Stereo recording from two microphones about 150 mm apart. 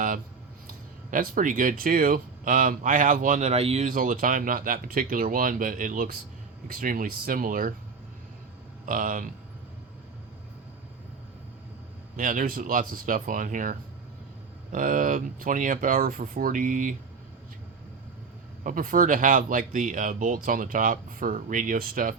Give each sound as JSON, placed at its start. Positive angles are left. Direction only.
{"t": 1.1, "sound": "speech", "side_deg": -65}
{"t": 3.8, "sound": "speech", "side_deg": -65}
{"t": 8.9, "sound": "speech", "side_deg": -65}
{"t": 12.1, "sound": "speech", "side_deg": -60}
{"t": 18.6, "sound": "speech", "side_deg": -65}